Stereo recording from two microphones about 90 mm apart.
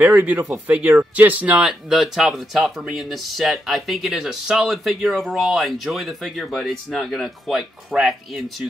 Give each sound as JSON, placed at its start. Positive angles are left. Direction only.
{"t": 0.0, "sound": "speech", "side_deg": -20}
{"t": 1.7, "sound": "speech", "side_deg": -5}